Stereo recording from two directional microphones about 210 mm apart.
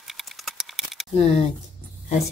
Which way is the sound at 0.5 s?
Centre (ahead or behind).